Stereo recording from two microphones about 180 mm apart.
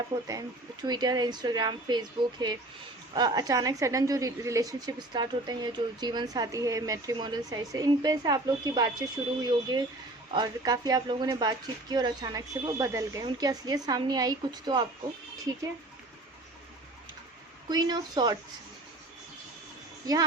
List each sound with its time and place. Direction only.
0.3 s a woman's voice: 20° right (ahead or behind)
17.7 s a woman's voice: 20° right (ahead or behind)
20.1 s a woman's voice: 20° right (ahead or behind)